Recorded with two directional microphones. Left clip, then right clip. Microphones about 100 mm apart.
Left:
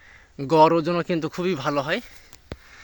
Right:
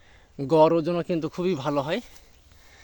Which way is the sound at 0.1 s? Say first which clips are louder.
Even; 20° right (ahead or behind).